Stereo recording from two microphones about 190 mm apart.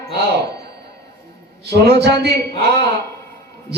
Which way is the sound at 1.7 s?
60° right (ahead or behind).